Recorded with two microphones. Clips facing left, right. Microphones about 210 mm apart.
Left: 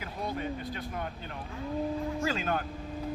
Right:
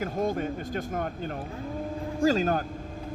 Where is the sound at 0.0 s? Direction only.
45° right (ahead or behind).